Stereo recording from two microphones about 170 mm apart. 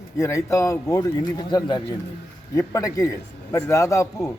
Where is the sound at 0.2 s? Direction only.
15° left (ahead or behind).